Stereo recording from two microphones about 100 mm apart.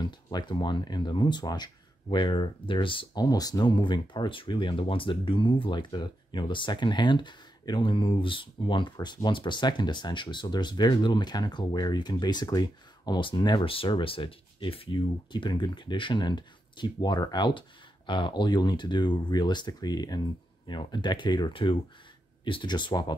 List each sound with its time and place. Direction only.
0.0 s speech: 45° left (ahead or behind)
3.3 s speech: 40° left (ahead or behind)